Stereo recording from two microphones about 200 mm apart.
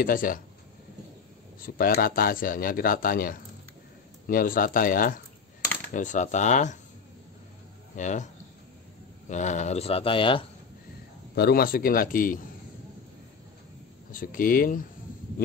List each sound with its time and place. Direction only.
0.0 s speech: 45° left (ahead or behind)
1.6 s speech: 45° left (ahead or behind)
7.9 s speech: 35° left (ahead or behind)
9.3 s speech: 35° left (ahead or behind)
11.3 s speech: 50° left (ahead or behind)
14.1 s speech: 45° left (ahead or behind)